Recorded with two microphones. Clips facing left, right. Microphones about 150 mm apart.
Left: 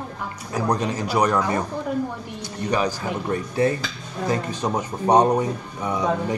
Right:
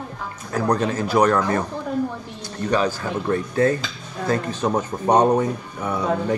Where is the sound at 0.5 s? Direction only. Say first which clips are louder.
Right 2 dB; 15° left (ahead or behind).